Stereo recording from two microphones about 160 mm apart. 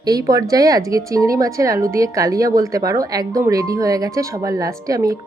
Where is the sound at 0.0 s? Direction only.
25° right (ahead or behind).